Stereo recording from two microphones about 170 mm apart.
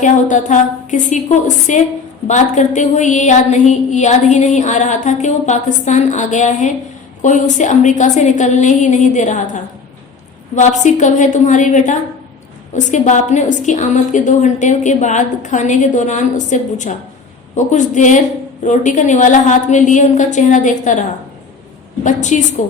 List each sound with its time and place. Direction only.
0.0 s a woman's voice: 45° left (ahead or behind)
22.0 s a woman's voice: 45° left (ahead or behind)